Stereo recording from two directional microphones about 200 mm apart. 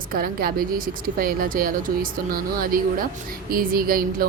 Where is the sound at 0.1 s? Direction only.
45° right (ahead or behind).